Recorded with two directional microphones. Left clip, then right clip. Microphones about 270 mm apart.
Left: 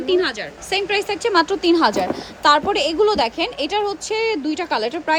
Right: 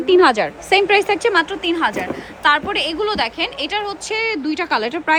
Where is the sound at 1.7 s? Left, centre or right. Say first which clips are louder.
Left 3 dB; centre.